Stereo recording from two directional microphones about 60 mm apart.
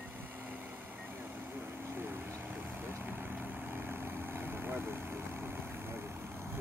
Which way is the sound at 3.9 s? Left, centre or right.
Right.